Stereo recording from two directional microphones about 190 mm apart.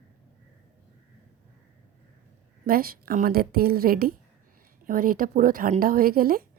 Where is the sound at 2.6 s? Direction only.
50° right (ahead or behind).